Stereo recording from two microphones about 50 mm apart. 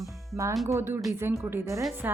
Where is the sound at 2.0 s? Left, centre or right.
Right.